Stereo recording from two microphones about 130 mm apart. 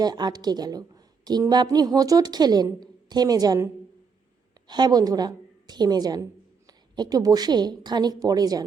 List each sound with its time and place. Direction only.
0.0 s a woman's voice: 30° right (ahead or behind)
4.7 s a woman's voice: 30° right (ahead or behind)